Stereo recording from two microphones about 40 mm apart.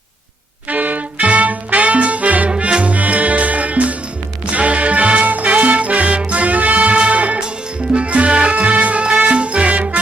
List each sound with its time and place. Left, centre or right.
0.7 s music: right
2.5 s music: right
2.9 s music: right